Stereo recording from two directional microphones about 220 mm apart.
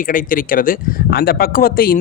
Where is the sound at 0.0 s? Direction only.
40° left (ahead or behind).